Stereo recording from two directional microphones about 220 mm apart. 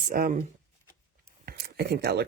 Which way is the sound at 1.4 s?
45° right (ahead or behind).